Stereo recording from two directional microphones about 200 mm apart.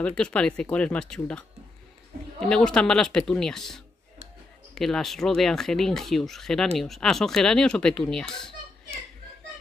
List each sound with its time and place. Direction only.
0.0 s speech: 5° left (ahead or behind)
2.4 s speech: 5° left (ahead or behind)